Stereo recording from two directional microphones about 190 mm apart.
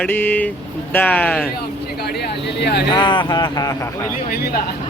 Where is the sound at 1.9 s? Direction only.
60° left (ahead or behind).